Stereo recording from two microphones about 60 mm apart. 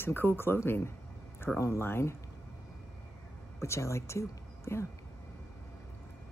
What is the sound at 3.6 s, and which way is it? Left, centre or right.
Speech, left.